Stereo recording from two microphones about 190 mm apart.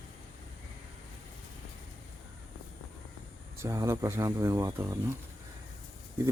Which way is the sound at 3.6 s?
15° right (ahead or behind).